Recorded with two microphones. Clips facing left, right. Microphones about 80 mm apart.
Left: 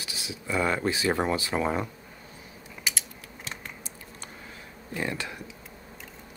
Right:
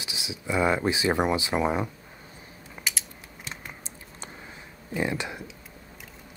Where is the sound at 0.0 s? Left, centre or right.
Centre.